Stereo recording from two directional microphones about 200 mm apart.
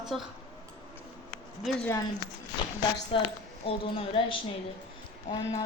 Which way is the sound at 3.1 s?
30° left (ahead or behind).